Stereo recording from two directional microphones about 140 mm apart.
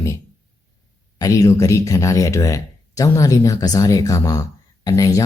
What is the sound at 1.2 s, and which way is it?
Speech, 25° left (ahead or behind).